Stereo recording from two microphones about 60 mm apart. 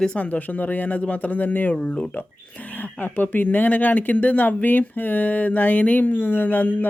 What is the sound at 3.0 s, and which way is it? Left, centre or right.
Speech, left.